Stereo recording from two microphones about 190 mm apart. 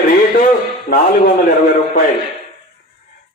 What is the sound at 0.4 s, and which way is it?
A man's voice, 50° left (ahead or behind).